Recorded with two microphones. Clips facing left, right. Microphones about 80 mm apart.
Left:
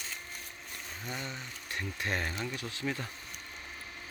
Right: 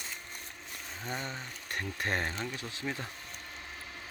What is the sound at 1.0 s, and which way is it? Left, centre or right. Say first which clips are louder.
Speech: right 3 dB; right.